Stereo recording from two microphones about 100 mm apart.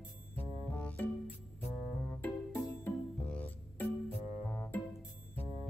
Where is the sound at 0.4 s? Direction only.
15° left (ahead or behind).